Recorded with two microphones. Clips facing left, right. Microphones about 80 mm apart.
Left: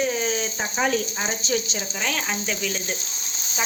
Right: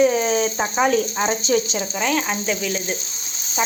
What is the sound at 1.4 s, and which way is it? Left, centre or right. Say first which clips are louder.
Speech: right 4 dB; centre.